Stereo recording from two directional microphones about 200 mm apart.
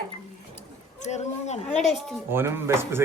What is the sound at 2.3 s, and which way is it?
Speech, 10° right (ahead or behind).